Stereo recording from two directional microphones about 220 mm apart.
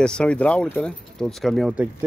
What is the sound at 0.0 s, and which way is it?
Speech, 5° left (ahead or behind).